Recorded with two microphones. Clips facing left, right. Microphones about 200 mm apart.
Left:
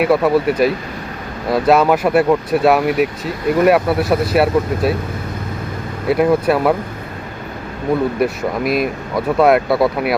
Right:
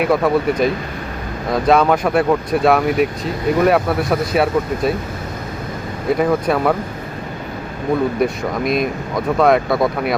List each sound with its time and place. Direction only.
0.0 s speech: 5° left (ahead or behind)
6.1 s speech: 5° left (ahead or behind)
8.2 s speech: 5° left (ahead or behind)